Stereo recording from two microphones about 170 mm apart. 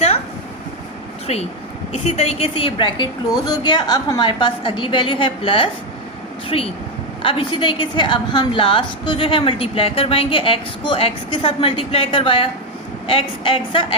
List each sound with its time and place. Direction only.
1.3 s a woman's voice: 40° left (ahead or behind)